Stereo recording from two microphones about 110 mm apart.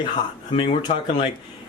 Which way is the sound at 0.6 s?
60° left (ahead or behind).